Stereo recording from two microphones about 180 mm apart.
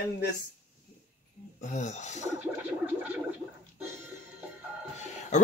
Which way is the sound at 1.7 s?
40° left (ahead or behind).